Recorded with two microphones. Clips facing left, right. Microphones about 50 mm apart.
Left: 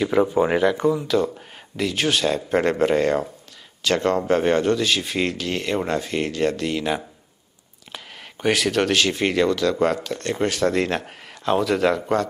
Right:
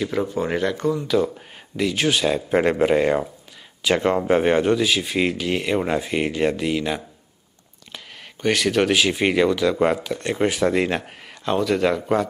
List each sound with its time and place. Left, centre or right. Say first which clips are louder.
0.0 s speech: left 5 dB; centre
1.0 s speech: right 1 dB; centre
7.9 s speech: left 1 dB; centre